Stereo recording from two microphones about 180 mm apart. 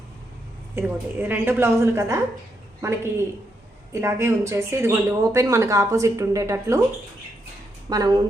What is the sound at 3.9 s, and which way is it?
Speech, 15° right (ahead or behind).